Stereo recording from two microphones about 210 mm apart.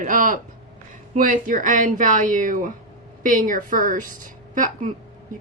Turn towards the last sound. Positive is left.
turn(degrees=-40)  # may be behind; listen again after turning